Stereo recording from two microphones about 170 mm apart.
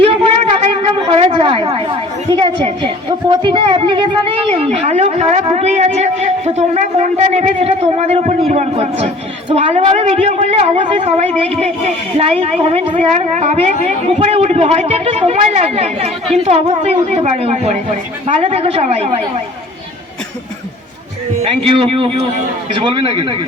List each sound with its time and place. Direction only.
0.0 s a sound: 30° right (ahead or behind)
2.4 s a woman's voice: 30° right (ahead or behind)
21.4 s a woman's voice: 35° right (ahead or behind)